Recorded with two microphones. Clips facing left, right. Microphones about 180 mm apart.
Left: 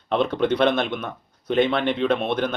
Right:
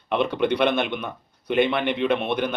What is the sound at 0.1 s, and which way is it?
A man's voice, 15° right (ahead or behind).